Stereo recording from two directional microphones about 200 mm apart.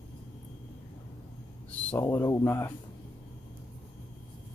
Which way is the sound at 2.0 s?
15° left (ahead or behind).